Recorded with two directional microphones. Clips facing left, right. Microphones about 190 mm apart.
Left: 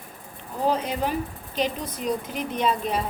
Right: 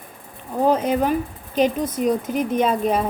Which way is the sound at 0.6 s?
50° right (ahead or behind).